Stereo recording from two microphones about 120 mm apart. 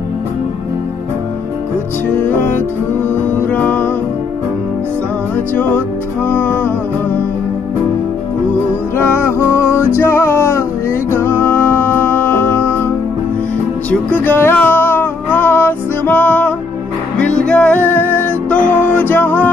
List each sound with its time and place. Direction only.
2.1 s music: 15° left (ahead or behind)
5.5 s music: 15° left (ahead or behind)
8.9 s music: 20° left (ahead or behind)
14.2 s music: 15° left (ahead or behind)